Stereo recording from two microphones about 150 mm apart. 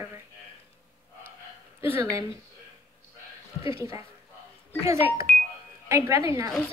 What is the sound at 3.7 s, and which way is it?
Speech, 20° right (ahead or behind).